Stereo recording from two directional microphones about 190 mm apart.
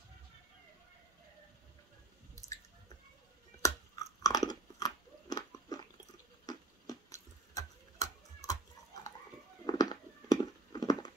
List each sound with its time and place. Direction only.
3.6 s chewing: 20° left (ahead or behind)
6.4 s tick-tock: 20° left (ahead or behind)
9.7 s a sound: 20° left (ahead or behind)